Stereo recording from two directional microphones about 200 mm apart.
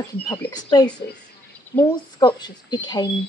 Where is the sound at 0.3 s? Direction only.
20° left (ahead or behind).